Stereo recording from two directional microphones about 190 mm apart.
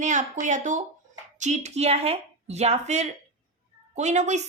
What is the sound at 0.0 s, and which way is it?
A woman's voice, 40° right (ahead or behind).